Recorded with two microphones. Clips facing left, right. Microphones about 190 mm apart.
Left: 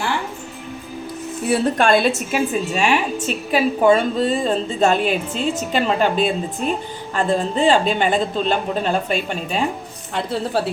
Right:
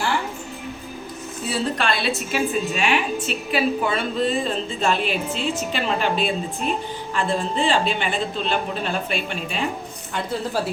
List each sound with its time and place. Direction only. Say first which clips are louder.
1.5 s a woman's voice: left 7 dB; 50° left (ahead or behind)